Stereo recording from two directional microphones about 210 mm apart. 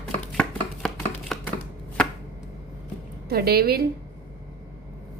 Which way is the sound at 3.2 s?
45° right (ahead or behind).